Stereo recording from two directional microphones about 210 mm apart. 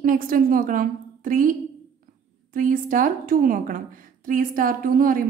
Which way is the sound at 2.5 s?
40° right (ahead or behind).